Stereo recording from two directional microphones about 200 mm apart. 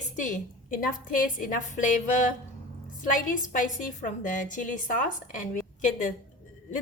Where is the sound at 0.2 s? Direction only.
40° left (ahead or behind).